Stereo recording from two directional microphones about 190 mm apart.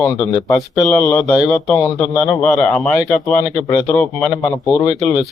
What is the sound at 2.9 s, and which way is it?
Speech, 20° left (ahead or behind).